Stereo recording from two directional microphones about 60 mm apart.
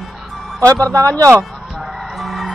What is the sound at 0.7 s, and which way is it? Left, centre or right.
Speech, right.